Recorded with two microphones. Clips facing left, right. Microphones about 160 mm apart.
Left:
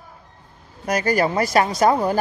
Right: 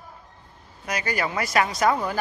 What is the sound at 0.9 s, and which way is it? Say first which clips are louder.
Speech: left 8 dB; 40° left (ahead or behind).